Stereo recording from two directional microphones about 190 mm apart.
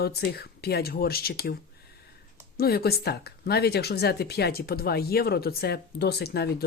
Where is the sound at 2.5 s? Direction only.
55° left (ahead or behind).